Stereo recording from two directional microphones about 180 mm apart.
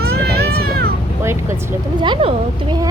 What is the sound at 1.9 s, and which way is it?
Speech, 25° right (ahead or behind).